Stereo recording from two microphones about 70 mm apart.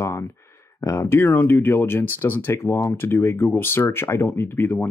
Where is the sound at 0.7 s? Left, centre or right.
Left.